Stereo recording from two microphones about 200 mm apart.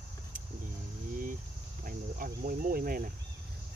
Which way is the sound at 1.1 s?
40° right (ahead or behind).